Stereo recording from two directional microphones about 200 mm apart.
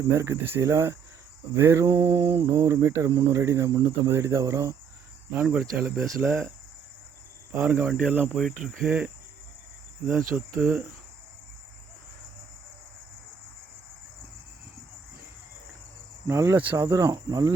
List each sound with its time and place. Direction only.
0.1 s speech: 15° right (ahead or behind)
7.5 s speech: 10° right (ahead or behind)
10.1 s speech: 10° right (ahead or behind)
16.2 s speech: 15° right (ahead or behind)